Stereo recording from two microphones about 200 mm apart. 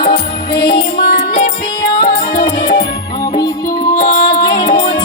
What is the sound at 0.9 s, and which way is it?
Music, 45° left (ahead or behind).